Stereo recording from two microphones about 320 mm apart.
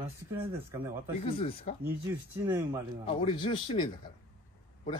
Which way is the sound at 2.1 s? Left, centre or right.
Centre.